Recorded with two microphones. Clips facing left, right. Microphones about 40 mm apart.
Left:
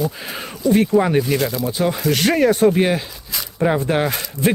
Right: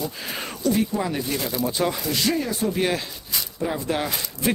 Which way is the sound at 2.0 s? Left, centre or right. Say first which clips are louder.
Left 8 dB; left.